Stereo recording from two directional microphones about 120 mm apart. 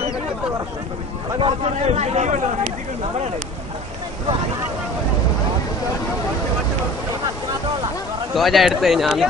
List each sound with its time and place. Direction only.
1.4 s a man's voice: 60° right (ahead or behind)
8.4 s speech: centre (ahead or behind)